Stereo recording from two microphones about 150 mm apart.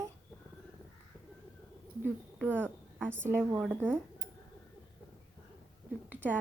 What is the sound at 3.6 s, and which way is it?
Speech, 10° right (ahead or behind).